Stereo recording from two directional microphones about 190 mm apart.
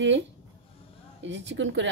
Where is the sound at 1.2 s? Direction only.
70° right (ahead or behind).